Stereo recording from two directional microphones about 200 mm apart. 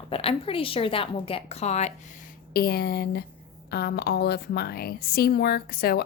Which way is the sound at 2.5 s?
50° left (ahead or behind).